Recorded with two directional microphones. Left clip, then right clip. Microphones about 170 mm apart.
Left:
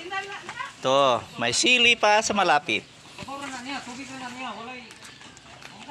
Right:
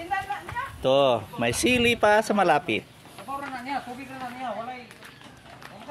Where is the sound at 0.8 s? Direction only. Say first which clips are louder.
Even; 25° right (ahead or behind).